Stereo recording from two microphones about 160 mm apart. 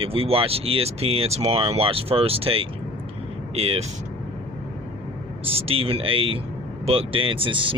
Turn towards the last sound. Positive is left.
turn(degrees=-35)  # may be behind; listen again after turning